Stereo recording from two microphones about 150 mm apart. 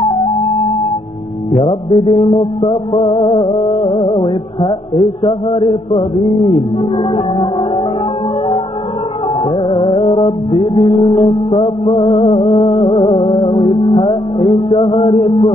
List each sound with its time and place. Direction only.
0.0 s music: 35° left (ahead or behind)
9.4 s music: 35° left (ahead or behind)